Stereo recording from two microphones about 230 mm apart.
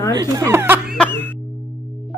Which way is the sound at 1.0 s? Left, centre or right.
Centre.